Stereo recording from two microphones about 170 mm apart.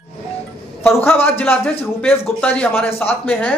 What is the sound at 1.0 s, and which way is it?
Speech, 10° left (ahead or behind).